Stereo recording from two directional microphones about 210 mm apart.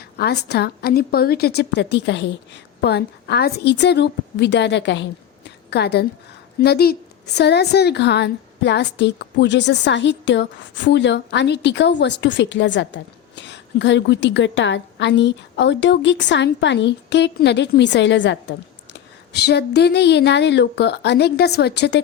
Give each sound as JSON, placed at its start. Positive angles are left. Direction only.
{"t": 0.2, "sound": "a woman's voice", "side_deg": 50}